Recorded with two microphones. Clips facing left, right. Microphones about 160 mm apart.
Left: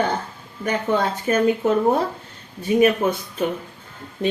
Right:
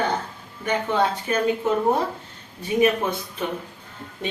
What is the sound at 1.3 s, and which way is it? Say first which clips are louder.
Speech: left 4 dB; 45° left (ahead or behind).